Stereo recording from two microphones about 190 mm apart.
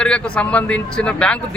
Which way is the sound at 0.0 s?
5° left (ahead or behind).